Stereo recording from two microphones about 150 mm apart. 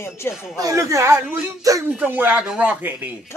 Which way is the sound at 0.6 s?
20° right (ahead or behind).